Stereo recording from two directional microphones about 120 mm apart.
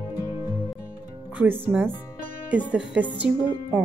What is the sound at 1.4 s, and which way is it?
Speech, 15° right (ahead or behind).